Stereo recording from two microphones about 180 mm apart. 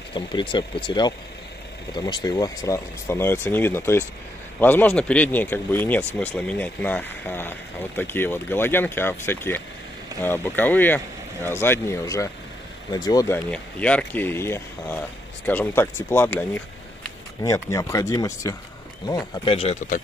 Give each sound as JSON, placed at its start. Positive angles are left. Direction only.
{"t": 0.1, "sound": "speech", "side_deg": 25}
{"t": 13.5, "sound": "speech", "side_deg": 5}